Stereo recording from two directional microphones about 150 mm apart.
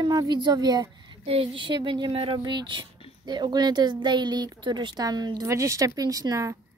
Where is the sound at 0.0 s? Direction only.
30° right (ahead or behind).